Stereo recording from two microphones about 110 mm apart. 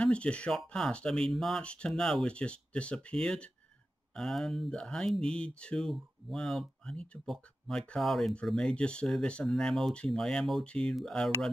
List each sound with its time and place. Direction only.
0.0 s speech: 10° left (ahead or behind)